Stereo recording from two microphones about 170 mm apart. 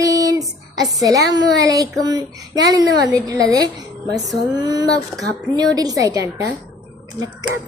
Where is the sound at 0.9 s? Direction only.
20° right (ahead or behind).